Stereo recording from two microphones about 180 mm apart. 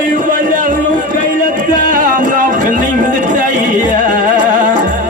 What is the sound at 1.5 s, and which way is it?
Music, 50° right (ahead or behind).